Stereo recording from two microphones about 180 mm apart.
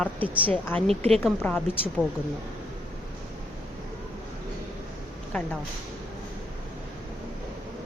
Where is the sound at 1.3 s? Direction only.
10° left (ahead or behind).